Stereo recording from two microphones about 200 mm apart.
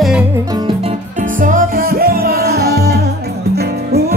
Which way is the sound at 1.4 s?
45° right (ahead or behind).